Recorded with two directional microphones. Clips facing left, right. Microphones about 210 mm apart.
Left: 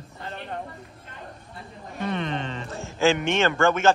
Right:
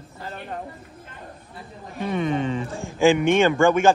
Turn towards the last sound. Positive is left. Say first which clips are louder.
# right 4 dB
turn(degrees=-15)  # may be behind; listen again after turning